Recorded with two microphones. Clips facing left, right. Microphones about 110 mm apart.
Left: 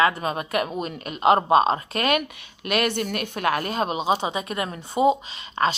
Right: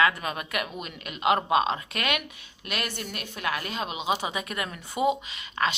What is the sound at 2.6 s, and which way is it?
A woman's voice, 60° left (ahead or behind).